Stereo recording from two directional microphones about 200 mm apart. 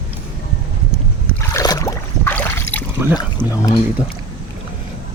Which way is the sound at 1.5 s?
15° left (ahead or behind).